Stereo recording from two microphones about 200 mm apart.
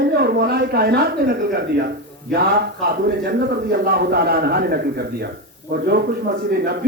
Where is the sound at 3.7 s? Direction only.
50° right (ahead or behind).